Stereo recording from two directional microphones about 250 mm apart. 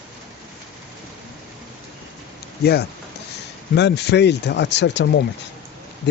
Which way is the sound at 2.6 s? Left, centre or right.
Left.